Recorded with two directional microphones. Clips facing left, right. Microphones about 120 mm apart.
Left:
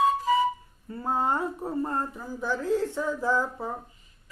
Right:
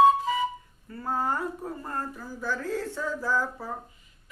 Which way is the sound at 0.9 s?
25° left (ahead or behind).